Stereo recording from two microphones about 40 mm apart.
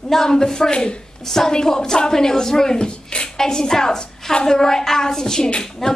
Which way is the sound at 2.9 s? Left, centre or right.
Left.